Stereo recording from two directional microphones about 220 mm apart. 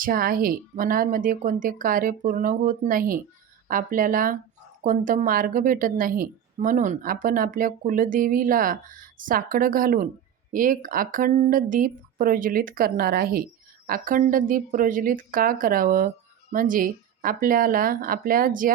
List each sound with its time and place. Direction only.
0.0 s speech: 40° right (ahead or behind)